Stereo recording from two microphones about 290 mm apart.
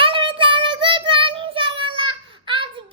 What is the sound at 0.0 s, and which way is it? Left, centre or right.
Child singing, centre.